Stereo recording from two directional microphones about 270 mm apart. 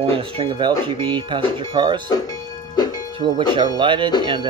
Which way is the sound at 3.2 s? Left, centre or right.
Centre.